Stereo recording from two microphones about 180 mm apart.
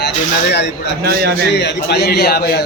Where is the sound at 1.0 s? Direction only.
60° right (ahead or behind).